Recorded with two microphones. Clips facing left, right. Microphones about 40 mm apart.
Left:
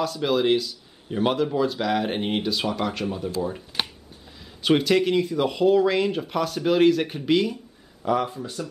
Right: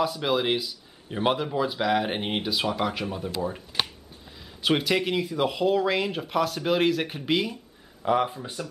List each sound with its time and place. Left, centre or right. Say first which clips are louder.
0.0 s speech: left 2 dB; centre
4.4 s speech: left 4 dB; centre
8.0 s speech: even; centre